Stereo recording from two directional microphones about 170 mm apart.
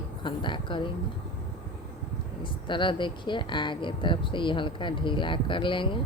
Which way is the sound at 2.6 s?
30° left (ahead or behind).